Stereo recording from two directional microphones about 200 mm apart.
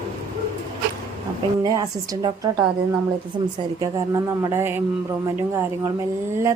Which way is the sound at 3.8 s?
15° right (ahead or behind).